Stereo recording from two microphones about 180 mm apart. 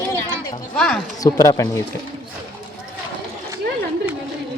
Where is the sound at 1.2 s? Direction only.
20° left (ahead or behind).